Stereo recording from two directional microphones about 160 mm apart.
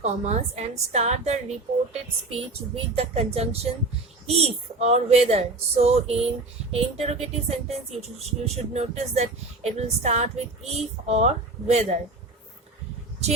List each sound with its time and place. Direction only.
0.0 s a woman's voice: 45° right (ahead or behind)